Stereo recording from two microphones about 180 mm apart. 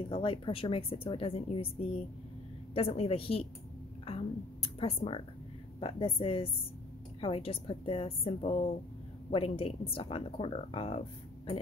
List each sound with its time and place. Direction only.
0.1 s a woman's voice: 30° left (ahead or behind)
4.0 s a sound: 30° left (ahead or behind)
5.8 s a woman's voice: 30° left (ahead or behind)